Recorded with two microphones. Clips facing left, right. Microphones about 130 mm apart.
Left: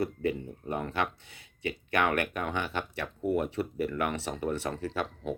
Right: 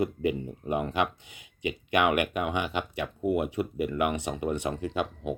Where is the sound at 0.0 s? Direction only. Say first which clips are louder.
Right 3 dB; 15° right (ahead or behind).